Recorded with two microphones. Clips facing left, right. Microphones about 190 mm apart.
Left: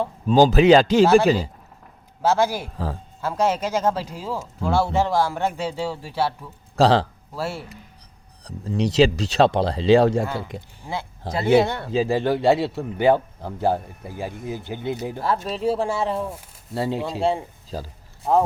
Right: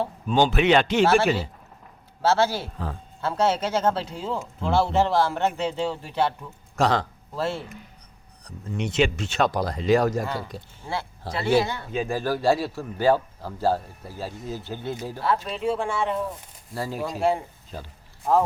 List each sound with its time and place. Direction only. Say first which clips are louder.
0.3 s speech: left 6 dB; 35° left (ahead or behind)
1.0 s speech: left 4 dB; 20° left (ahead or behind)
6.7 s speech: left 5 dB; 30° left (ahead or behind)
7.3 s speech: right 1 dB; 10° left (ahead or behind)
8.4 s speech: left 6 dB; 35° left (ahead or behind)
10.3 s speech: left 2 dB; 20° left (ahead or behind)
11.6 s speech: left 5 dB; 65° left (ahead or behind)
11.9 s speech: left 5 dB; 30° left (ahead or behind)
15.2 s speech: left 1 dB; 40° left (ahead or behind)